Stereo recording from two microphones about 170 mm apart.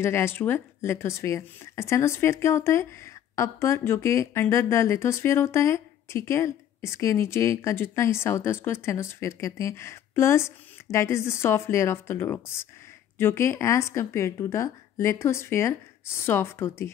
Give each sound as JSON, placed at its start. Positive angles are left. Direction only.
{"t": 0.0, "sound": "speech", "side_deg": 15}